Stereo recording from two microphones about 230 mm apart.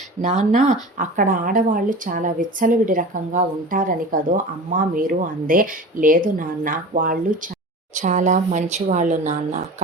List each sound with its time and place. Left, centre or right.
0.2 s speech: right